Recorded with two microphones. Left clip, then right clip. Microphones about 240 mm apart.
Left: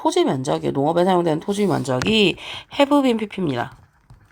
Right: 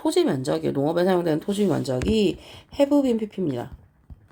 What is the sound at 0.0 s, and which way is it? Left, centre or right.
Speech, left.